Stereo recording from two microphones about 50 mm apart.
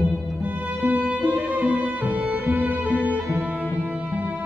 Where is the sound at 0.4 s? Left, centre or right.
Right.